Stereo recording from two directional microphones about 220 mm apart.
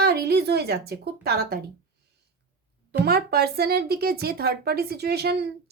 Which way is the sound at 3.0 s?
45° right (ahead or behind).